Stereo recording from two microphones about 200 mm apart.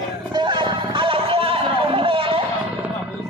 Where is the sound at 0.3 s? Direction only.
25° right (ahead or behind).